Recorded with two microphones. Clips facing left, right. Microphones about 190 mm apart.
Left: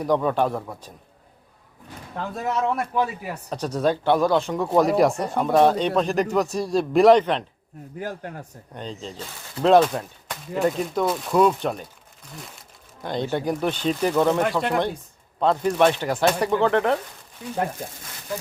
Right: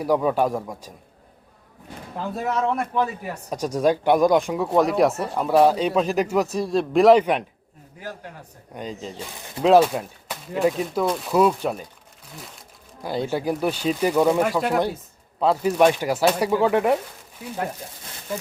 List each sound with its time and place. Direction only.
0.0 s speech: 10° right (ahead or behind)
2.1 s speech: centre (ahead or behind)
3.5 s speech: 10° right (ahead or behind)
4.6 s speech: centre (ahead or behind)
7.9 s a man's voice: 50° left (ahead or behind)
8.7 s speech: 10° right (ahead or behind)
12.4 s crumpling: centre (ahead or behind)
13.3 s speech: 5° right (ahead or behind)